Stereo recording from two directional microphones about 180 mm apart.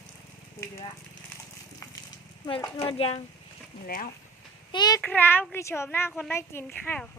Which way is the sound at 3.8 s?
55° left (ahead or behind).